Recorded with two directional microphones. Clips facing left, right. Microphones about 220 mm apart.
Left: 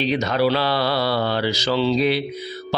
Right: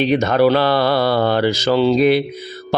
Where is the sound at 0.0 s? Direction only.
55° right (ahead or behind).